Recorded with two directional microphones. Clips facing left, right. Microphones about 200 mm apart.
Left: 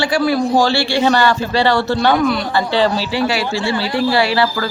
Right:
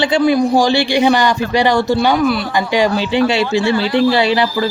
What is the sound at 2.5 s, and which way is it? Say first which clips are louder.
Speech: right 1 dB; 15° right (ahead or behind).